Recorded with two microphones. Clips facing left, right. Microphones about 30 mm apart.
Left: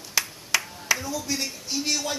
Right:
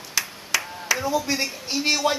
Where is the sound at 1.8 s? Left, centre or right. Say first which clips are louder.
Right 8 dB; right.